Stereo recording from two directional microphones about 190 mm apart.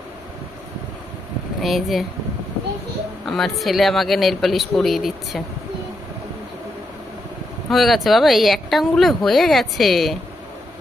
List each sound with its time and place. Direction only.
1.6 s speech: centre (ahead or behind)
3.3 s speech: centre (ahead or behind)
7.7 s speech: centre (ahead or behind)